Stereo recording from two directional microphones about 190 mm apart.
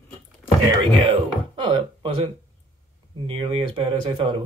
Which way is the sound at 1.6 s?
25° right (ahead or behind).